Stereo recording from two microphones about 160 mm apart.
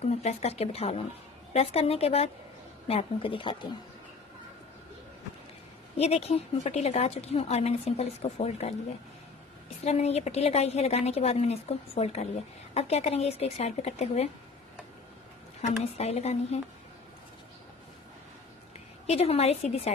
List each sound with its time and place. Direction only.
0.0 s a woman's voice: 45° left (ahead or behind)
5.9 s a woman's voice: 40° left (ahead or behind)
9.8 s a woman's voice: 40° left (ahead or behind)
15.8 s a woman's voice: 40° left (ahead or behind)
19.0 s a woman's voice: 40° left (ahead or behind)